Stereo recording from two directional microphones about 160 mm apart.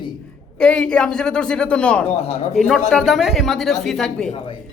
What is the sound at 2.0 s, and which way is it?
Speech, 40° left (ahead or behind).